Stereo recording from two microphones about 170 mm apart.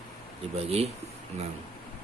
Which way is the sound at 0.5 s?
35° right (ahead or behind).